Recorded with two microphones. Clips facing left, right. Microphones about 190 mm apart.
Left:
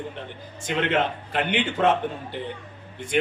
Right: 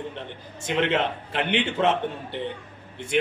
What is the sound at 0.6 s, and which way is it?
A man's voice, 25° right (ahead or behind).